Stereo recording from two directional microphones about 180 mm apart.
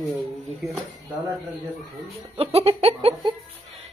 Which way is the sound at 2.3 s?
35° right (ahead or behind).